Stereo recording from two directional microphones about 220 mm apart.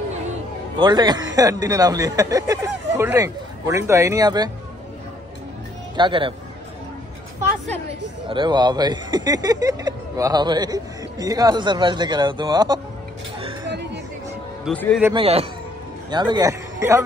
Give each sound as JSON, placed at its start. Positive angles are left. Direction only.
{"t": 0.7, "sound": "speech", "side_deg": -20}
{"t": 5.9, "sound": "speech", "side_deg": -20}
{"t": 8.3, "sound": "speech", "side_deg": -20}
{"t": 13.7, "sound": "music", "side_deg": -50}
{"t": 14.6, "sound": "speech", "side_deg": 5}
{"t": 15.1, "sound": "a man's voice", "side_deg": -25}